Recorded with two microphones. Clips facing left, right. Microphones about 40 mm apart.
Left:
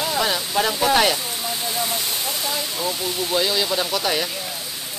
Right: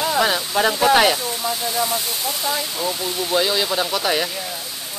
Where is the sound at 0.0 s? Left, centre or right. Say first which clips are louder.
Right 3 dB; centre.